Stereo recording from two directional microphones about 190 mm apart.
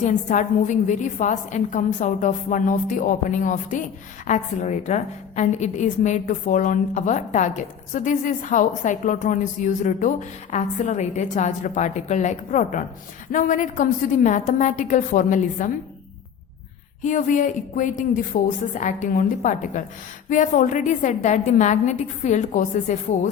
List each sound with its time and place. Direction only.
0.0 s a woman's voice: 40° left (ahead or behind)
17.0 s a woman's voice: 40° left (ahead or behind)